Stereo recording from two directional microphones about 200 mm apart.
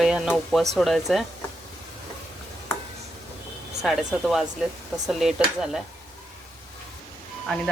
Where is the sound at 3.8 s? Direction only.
Centre (ahead or behind).